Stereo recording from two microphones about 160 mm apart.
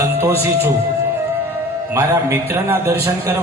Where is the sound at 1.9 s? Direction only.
15° right (ahead or behind).